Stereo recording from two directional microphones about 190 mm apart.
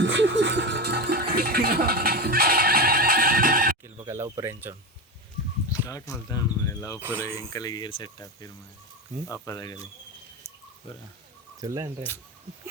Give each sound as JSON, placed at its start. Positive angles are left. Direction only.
{"t": 0.0, "sound": "music", "side_deg": -70}
{"t": 4.0, "sound": "speech", "side_deg": -15}
{"t": 5.9, "sound": "speech", "side_deg": 15}
{"t": 7.0, "sound": "speech", "side_deg": -10}
{"t": 7.5, "sound": "speech", "side_deg": 20}
{"t": 11.6, "sound": "speech", "side_deg": -15}